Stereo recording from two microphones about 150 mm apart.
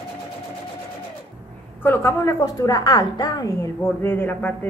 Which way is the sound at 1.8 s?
15° left (ahead or behind).